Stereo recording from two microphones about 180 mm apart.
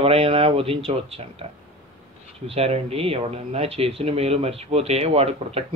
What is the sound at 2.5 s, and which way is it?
Speech, 35° right (ahead or behind).